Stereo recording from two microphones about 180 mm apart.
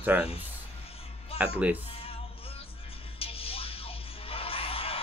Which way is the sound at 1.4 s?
10° right (ahead or behind).